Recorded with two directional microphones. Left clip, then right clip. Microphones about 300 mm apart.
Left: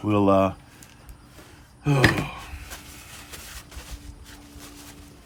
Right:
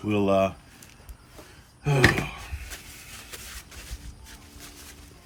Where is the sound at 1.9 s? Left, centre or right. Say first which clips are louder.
Left 1 dB; centre.